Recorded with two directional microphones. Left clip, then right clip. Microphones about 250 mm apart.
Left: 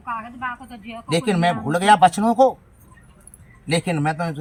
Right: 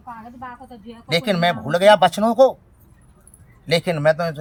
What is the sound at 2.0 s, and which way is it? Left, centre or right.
Speech, centre.